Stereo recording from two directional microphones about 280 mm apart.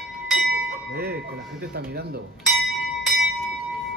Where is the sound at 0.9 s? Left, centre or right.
Right.